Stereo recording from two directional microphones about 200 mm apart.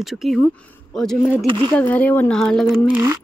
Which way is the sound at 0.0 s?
Centre (ahead or behind).